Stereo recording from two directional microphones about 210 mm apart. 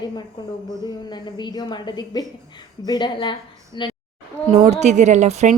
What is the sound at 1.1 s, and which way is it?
A woman's voice, 20° left (ahead or behind).